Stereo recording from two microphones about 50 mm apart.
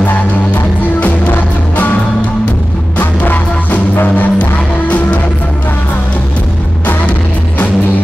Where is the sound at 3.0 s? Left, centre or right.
Left.